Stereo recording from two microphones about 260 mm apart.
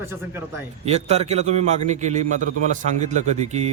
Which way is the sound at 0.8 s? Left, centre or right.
Right.